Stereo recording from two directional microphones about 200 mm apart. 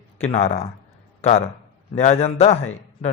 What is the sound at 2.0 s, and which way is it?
Speech, 30° left (ahead or behind).